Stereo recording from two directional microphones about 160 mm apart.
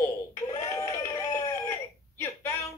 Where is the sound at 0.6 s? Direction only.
20° left (ahead or behind).